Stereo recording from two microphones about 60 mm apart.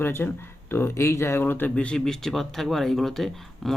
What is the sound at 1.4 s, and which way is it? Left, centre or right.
Speech, left.